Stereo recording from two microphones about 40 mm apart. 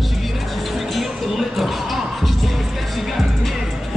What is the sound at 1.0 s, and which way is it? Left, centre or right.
Music, centre.